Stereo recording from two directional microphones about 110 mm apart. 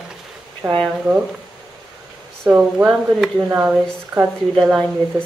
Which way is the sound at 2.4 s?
5° right (ahead or behind).